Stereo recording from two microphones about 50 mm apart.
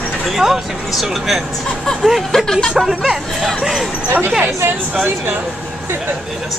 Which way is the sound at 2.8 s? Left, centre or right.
Centre.